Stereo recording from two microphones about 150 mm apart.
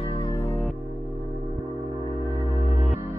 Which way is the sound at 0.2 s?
20° left (ahead or behind).